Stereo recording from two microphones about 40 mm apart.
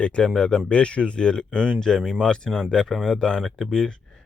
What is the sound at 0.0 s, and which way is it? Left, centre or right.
Speech, left.